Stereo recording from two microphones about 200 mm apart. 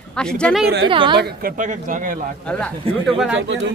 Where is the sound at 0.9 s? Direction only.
25° right (ahead or behind).